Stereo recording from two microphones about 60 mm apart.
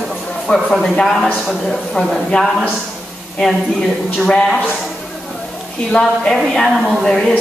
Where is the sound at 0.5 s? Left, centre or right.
Left.